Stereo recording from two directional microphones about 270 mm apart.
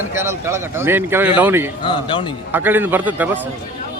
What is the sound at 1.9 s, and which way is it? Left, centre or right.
Speech, centre.